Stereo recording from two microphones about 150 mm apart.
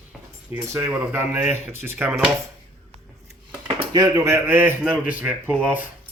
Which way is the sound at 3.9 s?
20° right (ahead or behind).